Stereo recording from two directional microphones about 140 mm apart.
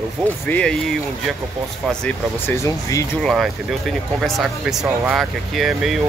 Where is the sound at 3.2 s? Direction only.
Centre (ahead or behind).